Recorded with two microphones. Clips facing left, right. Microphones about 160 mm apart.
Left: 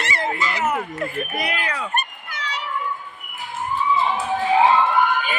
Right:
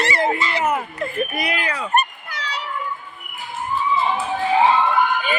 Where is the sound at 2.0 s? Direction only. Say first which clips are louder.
Right 6 dB; 35° right (ahead or behind).